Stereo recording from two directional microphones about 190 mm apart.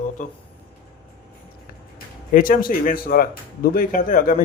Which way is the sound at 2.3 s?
45° left (ahead or behind).